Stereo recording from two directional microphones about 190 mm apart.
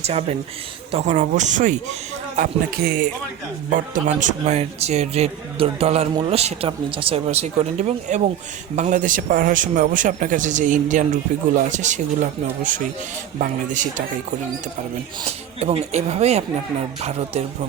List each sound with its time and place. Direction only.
0.0 s a man's voice: 35° right (ahead or behind)
2.7 s speech: 55° right (ahead or behind)
3.7 s a man's voice: 40° right (ahead or behind)
15.3 s a man's voice: 35° right (ahead or behind)